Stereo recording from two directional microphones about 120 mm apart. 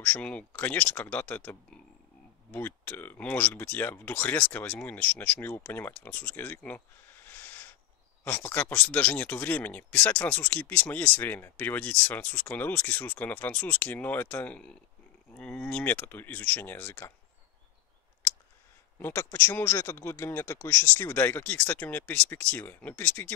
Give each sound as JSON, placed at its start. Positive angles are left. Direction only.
{"t": 0.0, "sound": "speech", "side_deg": 10}
{"t": 18.9, "sound": "speech", "side_deg": 20}